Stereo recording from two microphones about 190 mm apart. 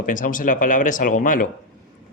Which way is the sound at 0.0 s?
45° left (ahead or behind).